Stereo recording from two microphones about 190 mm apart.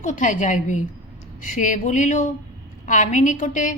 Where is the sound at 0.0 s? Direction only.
40° left (ahead or behind).